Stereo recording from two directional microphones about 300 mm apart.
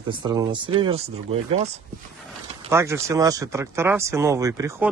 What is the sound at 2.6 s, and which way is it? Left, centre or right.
Speech, centre.